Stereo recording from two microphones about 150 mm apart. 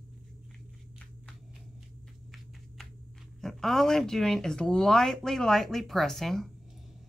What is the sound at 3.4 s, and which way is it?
Speech, centre (ahead or behind).